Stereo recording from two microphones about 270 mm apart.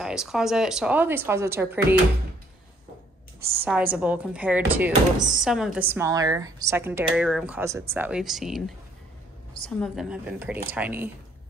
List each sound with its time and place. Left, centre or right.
0.0 s speech: centre
3.6 s speech: centre
9.8 s a woman's voice: centre